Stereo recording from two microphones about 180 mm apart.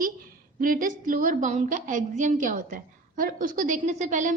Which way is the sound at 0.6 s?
50° right (ahead or behind).